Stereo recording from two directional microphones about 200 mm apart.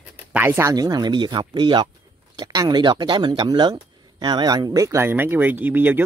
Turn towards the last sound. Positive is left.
turn(degrees=-10)  # may be behind; listen again after turning